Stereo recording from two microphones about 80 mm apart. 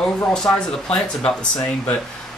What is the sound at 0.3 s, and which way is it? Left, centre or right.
Speech, centre.